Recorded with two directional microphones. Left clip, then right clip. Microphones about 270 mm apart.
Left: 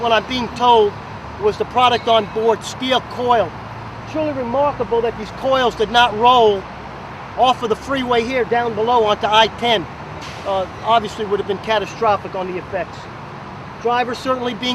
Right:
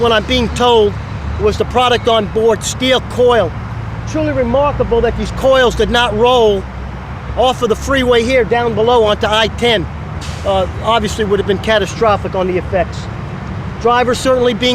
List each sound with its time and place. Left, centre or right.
0.0 s speech: right
13.8 s speech: right